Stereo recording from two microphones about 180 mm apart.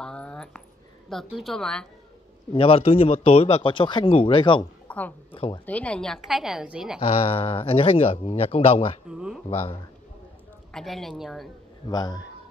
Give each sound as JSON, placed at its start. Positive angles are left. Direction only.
{"t": 0.0, "sound": "a sound", "side_deg": 5}
{"t": 1.3, "sound": "a woman's voice", "side_deg": 0}
{"t": 2.5, "sound": "speech", "side_deg": 30}
{"t": 4.8, "sound": "a sound", "side_deg": 10}
{"t": 5.3, "sound": "speech", "side_deg": 30}
{"t": 5.7, "sound": "a woman's voice", "side_deg": 5}
{"t": 7.0, "sound": "speech", "side_deg": 30}
{"t": 9.1, "sound": "a woman's voice", "side_deg": -5}
{"t": 9.5, "sound": "speech", "side_deg": 30}
{"t": 10.7, "sound": "a woman's voice", "side_deg": 0}
{"t": 11.9, "sound": "speech", "side_deg": 20}